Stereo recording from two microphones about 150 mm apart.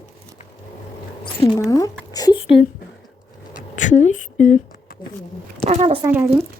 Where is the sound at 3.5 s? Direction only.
55° left (ahead or behind).